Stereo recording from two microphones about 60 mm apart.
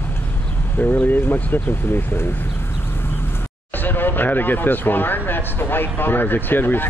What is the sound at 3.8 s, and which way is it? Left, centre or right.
Speech, left.